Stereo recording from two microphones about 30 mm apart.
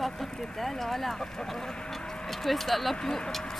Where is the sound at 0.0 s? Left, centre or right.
Centre.